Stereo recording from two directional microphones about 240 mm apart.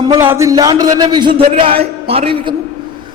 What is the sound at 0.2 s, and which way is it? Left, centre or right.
A man's voice, centre.